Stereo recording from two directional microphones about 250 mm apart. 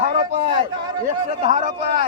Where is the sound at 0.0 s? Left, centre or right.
Right.